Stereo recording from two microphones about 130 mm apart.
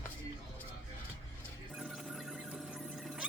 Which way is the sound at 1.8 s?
Centre (ahead or behind).